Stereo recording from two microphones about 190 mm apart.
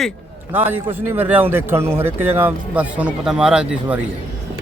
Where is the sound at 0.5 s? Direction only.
10° right (ahead or behind).